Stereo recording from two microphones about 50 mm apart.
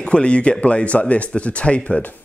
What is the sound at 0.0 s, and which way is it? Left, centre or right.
Speech, left.